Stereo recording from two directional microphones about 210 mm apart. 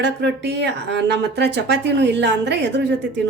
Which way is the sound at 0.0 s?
55° right (ahead or behind).